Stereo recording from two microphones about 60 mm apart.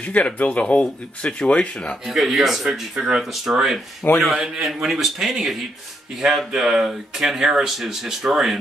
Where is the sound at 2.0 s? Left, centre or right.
Centre.